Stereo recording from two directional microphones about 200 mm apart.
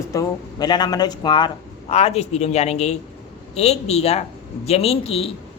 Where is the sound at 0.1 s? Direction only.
20° left (ahead or behind).